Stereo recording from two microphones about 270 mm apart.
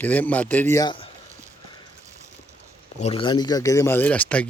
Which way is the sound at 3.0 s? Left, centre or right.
Centre.